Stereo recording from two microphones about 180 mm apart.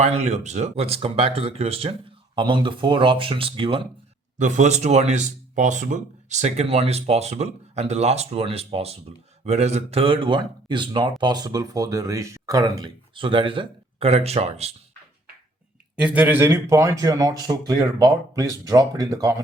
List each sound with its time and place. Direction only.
0.0 s speech: 35° right (ahead or behind)
4.4 s speech: 45° right (ahead or behind)
16.0 s speech: 5° right (ahead or behind)